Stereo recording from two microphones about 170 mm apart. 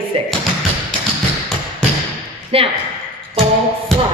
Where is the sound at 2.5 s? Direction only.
35° right (ahead or behind).